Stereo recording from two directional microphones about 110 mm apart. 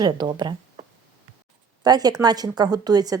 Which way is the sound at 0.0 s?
40° right (ahead or behind).